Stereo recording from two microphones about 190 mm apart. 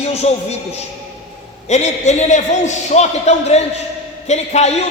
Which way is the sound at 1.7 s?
35° left (ahead or behind).